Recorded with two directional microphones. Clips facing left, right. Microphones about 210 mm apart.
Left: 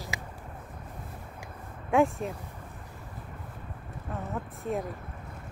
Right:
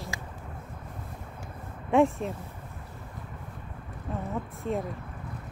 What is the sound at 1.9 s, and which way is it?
Speech, centre (ahead or behind).